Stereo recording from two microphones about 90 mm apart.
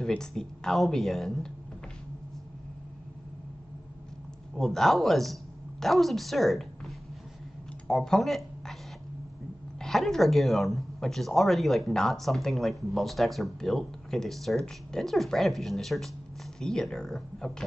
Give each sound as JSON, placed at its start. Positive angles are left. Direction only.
{"t": 0.0, "sound": "a woman's voice", "side_deg": 5}
{"t": 4.6, "sound": "a woman's voice", "side_deg": 5}
{"t": 7.9, "sound": "speech", "side_deg": 5}
{"t": 9.8, "sound": "a woman's voice", "side_deg": 5}